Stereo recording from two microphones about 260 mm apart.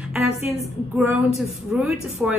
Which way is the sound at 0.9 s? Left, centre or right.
Centre.